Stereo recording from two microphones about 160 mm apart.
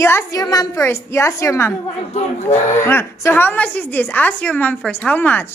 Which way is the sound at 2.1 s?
45° left (ahead or behind).